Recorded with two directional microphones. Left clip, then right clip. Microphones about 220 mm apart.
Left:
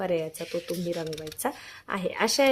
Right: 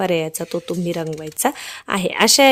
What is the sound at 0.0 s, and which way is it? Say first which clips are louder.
A woman's voice: right 8 dB; 50° right (ahead or behind).